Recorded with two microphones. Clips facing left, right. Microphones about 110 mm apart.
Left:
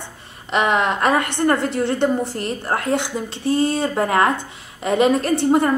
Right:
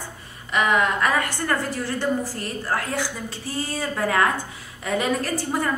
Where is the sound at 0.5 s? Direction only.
25° left (ahead or behind).